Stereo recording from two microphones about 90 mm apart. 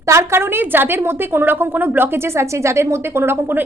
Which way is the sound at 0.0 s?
35° right (ahead or behind).